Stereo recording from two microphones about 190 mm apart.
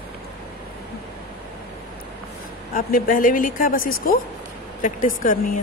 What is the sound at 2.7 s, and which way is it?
Speech, 45° left (ahead or behind).